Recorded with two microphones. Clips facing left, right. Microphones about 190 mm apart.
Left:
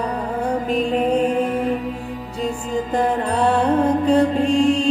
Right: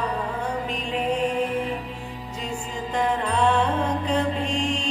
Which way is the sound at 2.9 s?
40° left (ahead or behind).